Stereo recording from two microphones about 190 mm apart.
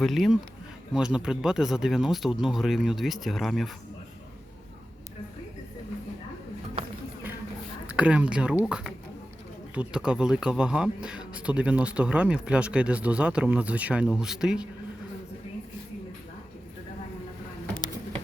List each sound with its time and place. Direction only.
0.0 s speech: centre (ahead or behind)
7.9 s speech: 5° right (ahead or behind)
9.7 s speech: 5° right (ahead or behind)